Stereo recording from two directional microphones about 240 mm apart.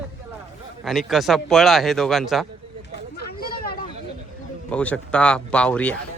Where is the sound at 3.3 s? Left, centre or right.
Left.